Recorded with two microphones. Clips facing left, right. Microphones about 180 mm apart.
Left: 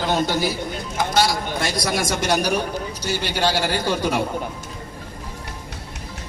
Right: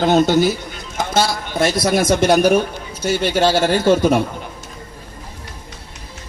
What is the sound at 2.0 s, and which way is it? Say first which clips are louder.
Speech: right 9 dB; 55° right (ahead or behind).